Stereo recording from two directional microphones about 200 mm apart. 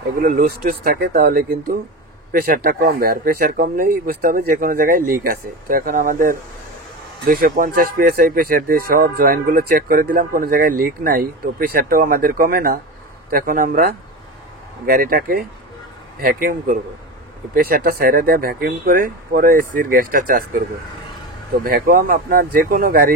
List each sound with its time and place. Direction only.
0.2 s speech: 45° right (ahead or behind)
21.6 s speech: 50° right (ahead or behind)